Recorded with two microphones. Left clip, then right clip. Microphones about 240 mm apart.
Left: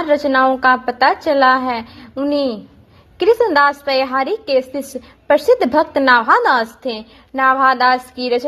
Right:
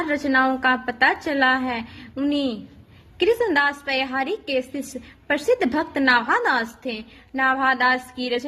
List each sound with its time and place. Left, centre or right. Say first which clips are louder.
0.1 s a woman's voice: left 8 dB; centre